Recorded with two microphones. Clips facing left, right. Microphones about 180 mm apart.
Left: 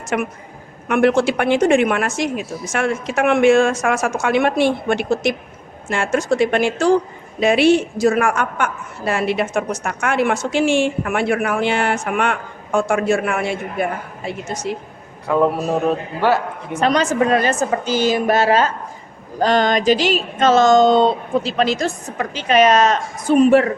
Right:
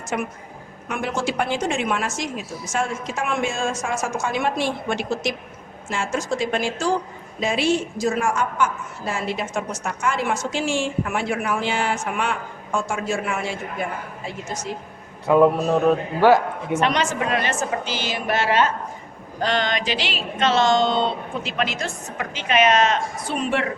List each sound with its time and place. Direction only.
0.1 s a woman's voice: 75° left (ahead or behind)
15.3 s speech: 20° right (ahead or behind)
15.6 s a man's voice: 10° left (ahead or behind)
16.7 s a woman's voice: 40° left (ahead or behind)